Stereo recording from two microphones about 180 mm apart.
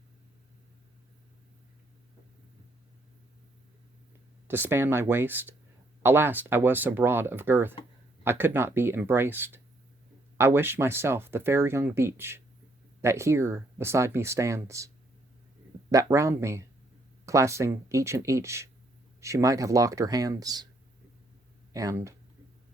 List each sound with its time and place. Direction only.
4.4 s speech: 10° right (ahead or behind)
15.9 s speech: 20° right (ahead or behind)
21.7 s speech: 20° right (ahead or behind)